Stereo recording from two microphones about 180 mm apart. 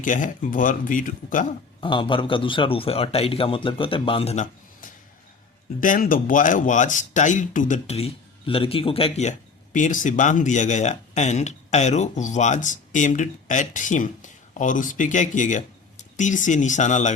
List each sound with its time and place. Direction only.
0.0 s speech: 45° left (ahead or behind)
1.8 s a man's voice: 25° left (ahead or behind)
5.8 s speech: 50° left (ahead or behind); by 9.3 s 35° left (ahead or behind)
9.7 s speech: 45° left (ahead or behind)